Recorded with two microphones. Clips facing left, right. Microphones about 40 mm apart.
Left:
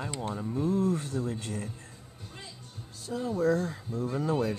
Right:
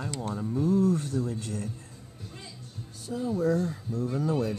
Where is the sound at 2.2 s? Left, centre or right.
Centre.